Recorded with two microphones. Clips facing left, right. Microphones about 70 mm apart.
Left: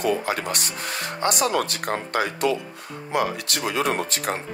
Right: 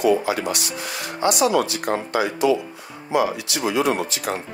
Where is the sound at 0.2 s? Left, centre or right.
Left.